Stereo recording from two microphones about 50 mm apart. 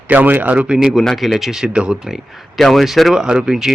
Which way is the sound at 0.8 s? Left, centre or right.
Centre.